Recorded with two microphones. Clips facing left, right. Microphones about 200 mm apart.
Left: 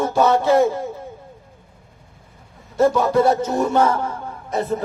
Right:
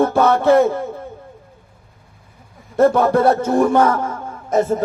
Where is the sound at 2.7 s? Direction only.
55° right (ahead or behind).